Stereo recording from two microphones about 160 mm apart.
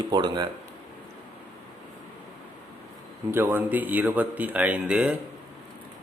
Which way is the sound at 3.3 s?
15° right (ahead or behind).